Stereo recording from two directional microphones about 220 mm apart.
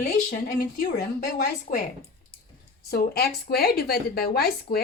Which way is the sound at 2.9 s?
45° left (ahead or behind).